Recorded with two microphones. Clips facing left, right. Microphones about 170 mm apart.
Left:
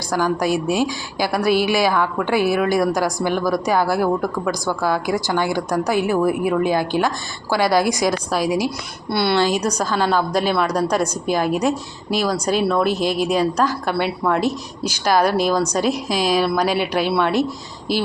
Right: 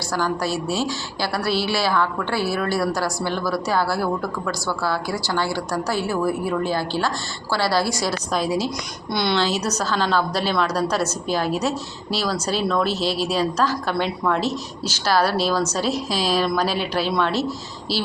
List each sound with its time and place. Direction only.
0.1 s a woman's voice: 15° left (ahead or behind)
13.0 s speech: 50° left (ahead or behind)
13.2 s a woman's voice: 10° left (ahead or behind)